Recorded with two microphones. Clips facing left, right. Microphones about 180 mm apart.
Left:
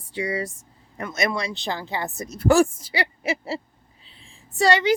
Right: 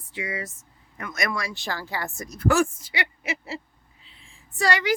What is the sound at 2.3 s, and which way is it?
A woman's voice, 30° left (ahead or behind).